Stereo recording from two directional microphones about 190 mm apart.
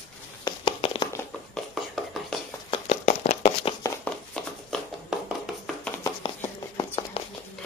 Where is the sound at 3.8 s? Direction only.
15° left (ahead or behind).